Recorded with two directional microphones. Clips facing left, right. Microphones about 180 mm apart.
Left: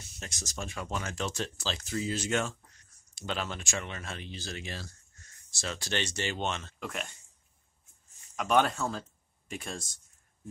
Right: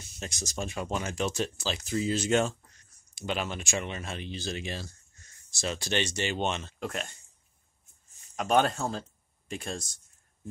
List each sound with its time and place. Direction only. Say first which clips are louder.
0.2 s speech: right 5 dB; 20° right (ahead or behind)
6.8 s speech: right 3 dB; 35° right (ahead or behind)
8.4 s speech: right 1 dB; 35° right (ahead or behind)